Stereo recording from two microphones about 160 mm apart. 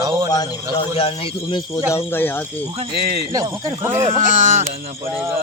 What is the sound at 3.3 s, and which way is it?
Speech, 20° right (ahead or behind).